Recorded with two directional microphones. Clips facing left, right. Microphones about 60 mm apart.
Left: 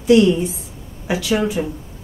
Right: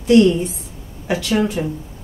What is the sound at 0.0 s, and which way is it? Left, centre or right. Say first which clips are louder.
A woman's voice: even; centre.